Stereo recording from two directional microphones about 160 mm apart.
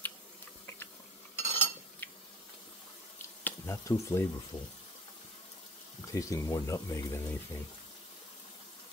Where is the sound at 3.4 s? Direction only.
15° left (ahead or behind).